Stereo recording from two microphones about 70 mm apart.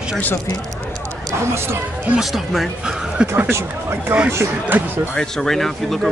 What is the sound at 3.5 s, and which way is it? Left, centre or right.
Speech, right.